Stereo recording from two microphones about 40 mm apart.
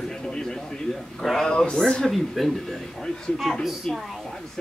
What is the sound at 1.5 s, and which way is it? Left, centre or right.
Speech, left.